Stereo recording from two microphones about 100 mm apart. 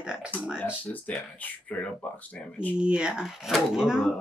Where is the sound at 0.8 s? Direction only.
15° left (ahead or behind).